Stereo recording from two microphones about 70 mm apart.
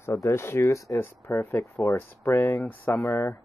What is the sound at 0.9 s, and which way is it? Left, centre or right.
Speech, left.